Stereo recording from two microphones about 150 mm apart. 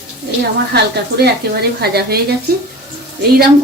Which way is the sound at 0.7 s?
90° right.